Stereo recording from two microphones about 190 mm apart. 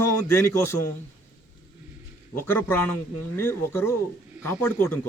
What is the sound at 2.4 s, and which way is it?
A man's voice, 10° left (ahead or behind).